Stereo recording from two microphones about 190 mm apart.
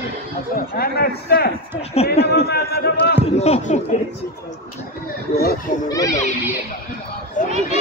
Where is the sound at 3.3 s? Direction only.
35° left (ahead or behind).